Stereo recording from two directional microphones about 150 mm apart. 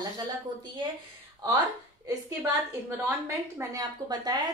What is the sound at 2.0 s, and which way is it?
A woman's voice, 15° right (ahead or behind).